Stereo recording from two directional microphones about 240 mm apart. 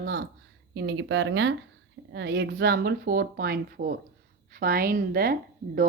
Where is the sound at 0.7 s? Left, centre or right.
Right.